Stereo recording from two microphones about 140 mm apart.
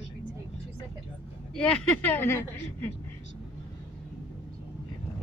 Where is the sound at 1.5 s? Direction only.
10° left (ahead or behind).